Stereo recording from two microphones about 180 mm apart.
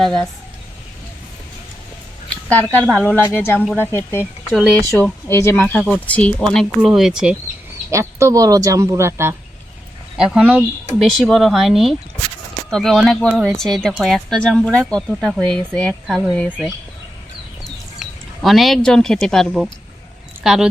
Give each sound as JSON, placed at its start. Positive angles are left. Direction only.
{"t": 0.0, "sound": "speech", "side_deg": 0}
{"t": 2.3, "sound": "a sound", "side_deg": 5}
{"t": 2.9, "sound": "speech", "side_deg": 5}
{"t": 7.9, "sound": "speech", "side_deg": -15}
{"t": 10.2, "sound": "speech", "side_deg": -5}
{"t": 18.0, "sound": "speech", "side_deg": 0}